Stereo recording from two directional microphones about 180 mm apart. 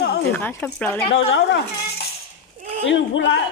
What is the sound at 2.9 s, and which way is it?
Speech, 90° left.